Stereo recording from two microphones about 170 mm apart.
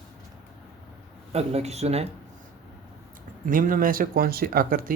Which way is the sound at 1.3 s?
40° right (ahead or behind).